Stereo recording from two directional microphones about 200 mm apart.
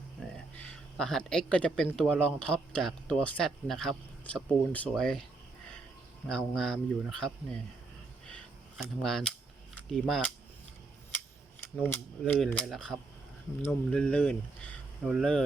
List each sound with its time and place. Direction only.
0.7 s speech: 5° left (ahead or behind)
6.2 s speech: 5° left (ahead or behind)
8.8 s speech: centre (ahead or behind)
11.8 s speech: 10° left (ahead or behind)